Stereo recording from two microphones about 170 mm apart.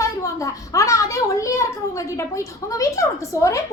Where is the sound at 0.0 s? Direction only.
20° left (ahead or behind).